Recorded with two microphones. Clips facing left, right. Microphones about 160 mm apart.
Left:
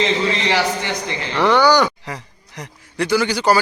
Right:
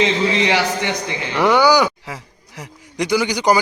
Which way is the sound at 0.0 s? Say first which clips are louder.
Right 2 dB; 15° right (ahead or behind).